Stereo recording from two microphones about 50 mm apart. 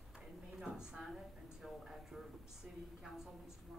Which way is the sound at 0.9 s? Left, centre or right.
Centre.